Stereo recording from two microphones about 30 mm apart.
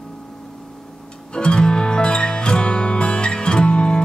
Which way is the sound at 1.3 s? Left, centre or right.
Left.